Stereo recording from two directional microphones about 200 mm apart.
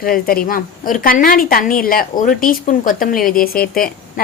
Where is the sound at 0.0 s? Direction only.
45° left (ahead or behind).